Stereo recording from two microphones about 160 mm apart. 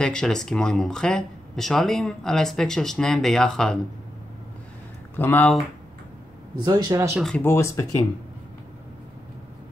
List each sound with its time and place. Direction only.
0.0 s speech: 5° left (ahead or behind)
5.1 s speech: 15° left (ahead or behind)
6.6 s speech: 25° right (ahead or behind)
7.2 s speech: centre (ahead or behind)
7.4 s speech: 15° left (ahead or behind)